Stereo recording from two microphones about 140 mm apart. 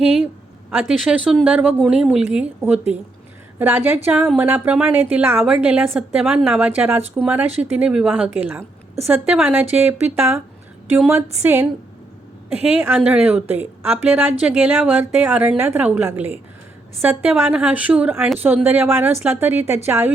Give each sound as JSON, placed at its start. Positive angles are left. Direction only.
{"t": 0.0, "sound": "a woman's voice", "side_deg": -5}
{"t": 13.0, "sound": "a woman's voice", "side_deg": -10}